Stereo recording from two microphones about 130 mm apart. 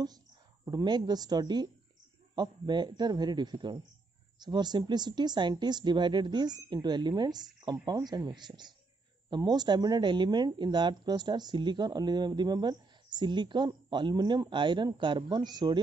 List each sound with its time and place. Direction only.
0.7 s speech: 30° right (ahead or behind)